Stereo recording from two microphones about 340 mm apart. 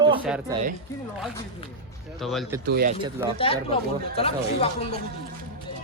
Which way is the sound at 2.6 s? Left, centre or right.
Right.